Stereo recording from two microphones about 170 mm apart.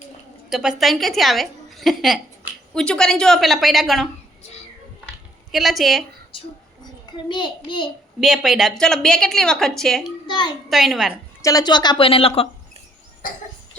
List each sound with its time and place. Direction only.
0.5 s a woman's voice: 5° right (ahead or behind)
5.5 s a woman's voice: centre (ahead or behind)
7.3 s a woman's voice: 30° left (ahead or behind)
8.2 s a woman's voice: centre (ahead or behind)
10.2 s a woman's voice: 25° left (ahead or behind)
10.7 s a woman's voice: centre (ahead or behind)
11.4 s a woman's voice: 25° left (ahead or behind)
13.2 s cough: 55° left (ahead or behind)